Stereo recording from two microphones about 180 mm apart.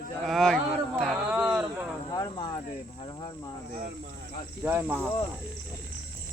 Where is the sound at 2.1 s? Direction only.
25° left (ahead or behind).